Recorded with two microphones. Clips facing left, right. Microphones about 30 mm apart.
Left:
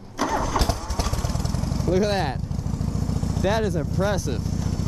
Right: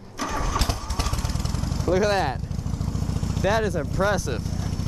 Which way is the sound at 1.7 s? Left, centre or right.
Centre.